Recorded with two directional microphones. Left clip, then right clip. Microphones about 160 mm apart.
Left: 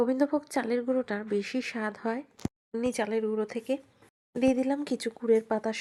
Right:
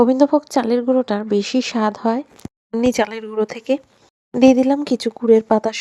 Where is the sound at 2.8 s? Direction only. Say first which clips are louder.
Right 10 dB; 40° right (ahead or behind).